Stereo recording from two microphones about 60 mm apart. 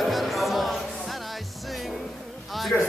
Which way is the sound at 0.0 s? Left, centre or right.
Centre.